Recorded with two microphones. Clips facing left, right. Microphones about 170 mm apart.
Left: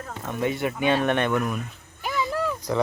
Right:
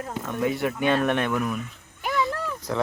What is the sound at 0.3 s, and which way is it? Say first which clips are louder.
Speech: even; centre (ahead or behind).